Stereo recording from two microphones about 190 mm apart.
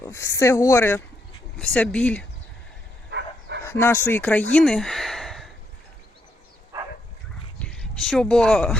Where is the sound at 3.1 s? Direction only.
70° right (ahead or behind).